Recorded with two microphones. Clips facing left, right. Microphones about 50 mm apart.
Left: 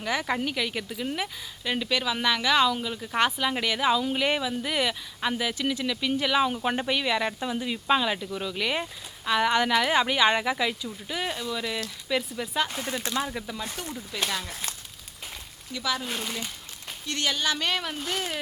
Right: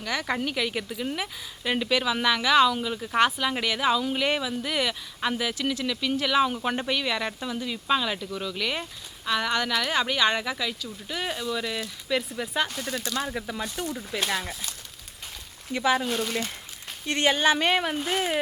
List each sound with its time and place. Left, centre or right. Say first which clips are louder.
0.0 s a woman's voice: left 1 dB; centre
10.8 s a woman's voice: even; centre
12.6 s speech: even; centre
13.2 s a woman's voice: right 2 dB; centre
13.8 s speech: right 5 dB; right
14.2 s speech: right 2 dB; centre
15.7 s speech: right 6 dB; right
16.0 s a woman's voice: right 5 dB; centre
17.1 s speech: right 6 dB; right